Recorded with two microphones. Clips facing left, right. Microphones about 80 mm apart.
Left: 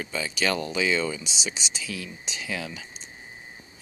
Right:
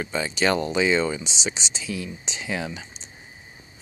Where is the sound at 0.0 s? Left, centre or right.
Right.